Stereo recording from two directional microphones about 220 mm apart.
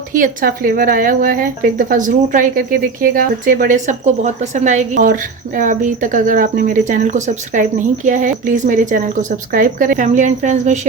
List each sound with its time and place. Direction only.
0.1 s speech: 40° right (ahead or behind)